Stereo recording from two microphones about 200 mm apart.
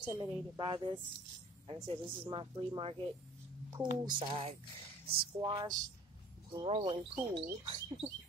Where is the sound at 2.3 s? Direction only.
25° right (ahead or behind).